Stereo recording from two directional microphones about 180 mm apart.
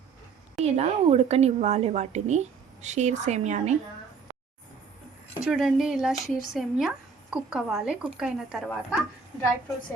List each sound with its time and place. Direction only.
0.6 s a woman's voice: 35° right (ahead or behind)
5.5 s speech: centre (ahead or behind)